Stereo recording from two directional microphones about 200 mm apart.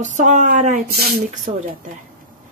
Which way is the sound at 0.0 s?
40° right (ahead or behind).